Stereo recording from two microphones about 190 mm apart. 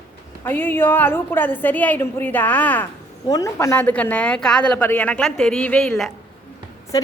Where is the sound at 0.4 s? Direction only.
10° left (ahead or behind).